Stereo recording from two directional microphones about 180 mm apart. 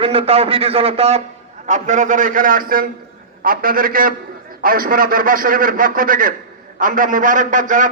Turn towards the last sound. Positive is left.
turn(degrees=-45)  # may be behind; listen again after turning